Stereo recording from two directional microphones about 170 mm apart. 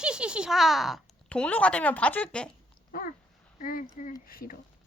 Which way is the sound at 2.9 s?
55° left (ahead or behind).